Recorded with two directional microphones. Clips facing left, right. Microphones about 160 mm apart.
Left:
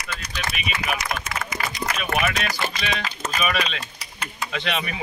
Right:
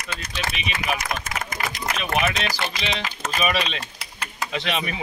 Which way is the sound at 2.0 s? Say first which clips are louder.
Right 1 dB; 25° right (ahead or behind).